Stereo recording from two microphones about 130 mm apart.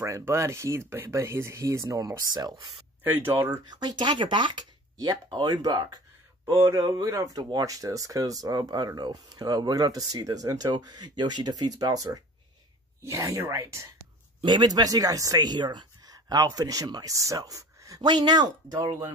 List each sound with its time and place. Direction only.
0.0 s speech: 20° right (ahead or behind)
3.0 s speech: 15° right (ahead or behind)
3.7 s speech: 35° right (ahead or behind)
6.5 s speech: 20° right (ahead or behind)
14.4 s speech: 35° right (ahead or behind)